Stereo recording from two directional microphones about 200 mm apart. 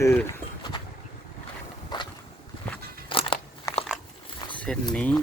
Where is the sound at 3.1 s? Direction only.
25° left (ahead or behind).